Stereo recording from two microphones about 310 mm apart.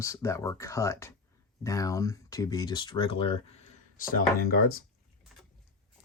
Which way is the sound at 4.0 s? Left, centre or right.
Left.